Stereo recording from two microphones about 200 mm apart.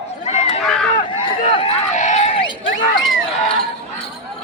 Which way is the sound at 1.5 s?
30° left (ahead or behind).